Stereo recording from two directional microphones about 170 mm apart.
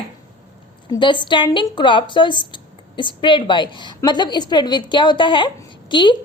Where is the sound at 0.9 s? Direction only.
30° left (ahead or behind).